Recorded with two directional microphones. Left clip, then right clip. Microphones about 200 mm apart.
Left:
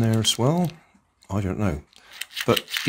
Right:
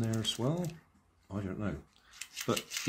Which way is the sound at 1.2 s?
50° left (ahead or behind).